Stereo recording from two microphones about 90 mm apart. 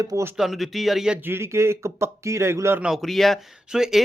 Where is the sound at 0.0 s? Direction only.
40° right (ahead or behind).